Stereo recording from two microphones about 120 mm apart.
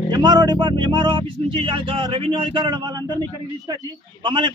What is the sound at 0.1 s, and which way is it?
A man's voice, 35° right (ahead or behind).